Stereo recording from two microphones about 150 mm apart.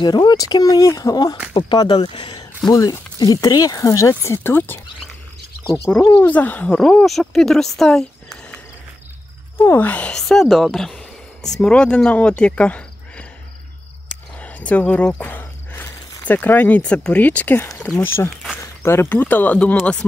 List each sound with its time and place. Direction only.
0.0 s speech: 30° left (ahead or behind); by 8.5 s 5° left (ahead or behind)
9.6 s speech: 15° left (ahead or behind)
14.4 s speech: 10° left (ahead or behind)